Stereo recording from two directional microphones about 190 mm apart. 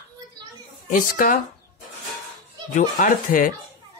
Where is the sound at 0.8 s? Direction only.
45° left (ahead or behind).